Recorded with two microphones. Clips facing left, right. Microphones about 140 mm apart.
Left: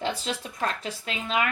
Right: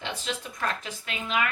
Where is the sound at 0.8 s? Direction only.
35° left (ahead or behind).